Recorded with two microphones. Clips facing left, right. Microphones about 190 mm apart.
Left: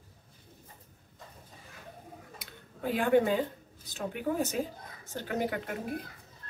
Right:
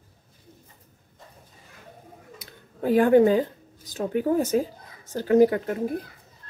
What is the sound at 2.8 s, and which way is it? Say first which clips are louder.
Speech: right 9 dB; 45° right (ahead or behind).